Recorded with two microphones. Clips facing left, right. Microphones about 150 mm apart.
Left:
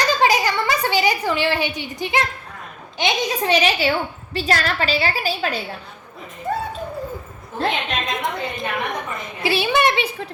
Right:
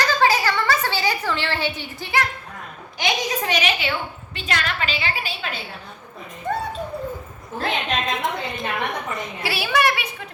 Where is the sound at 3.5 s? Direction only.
30° left (ahead or behind).